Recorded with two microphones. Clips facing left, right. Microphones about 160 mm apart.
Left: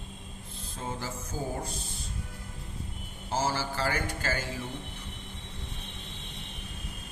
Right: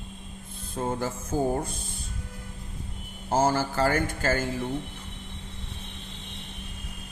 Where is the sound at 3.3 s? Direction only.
50° right (ahead or behind).